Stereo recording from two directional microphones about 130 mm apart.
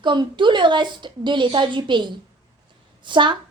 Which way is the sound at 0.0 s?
35° right (ahead or behind).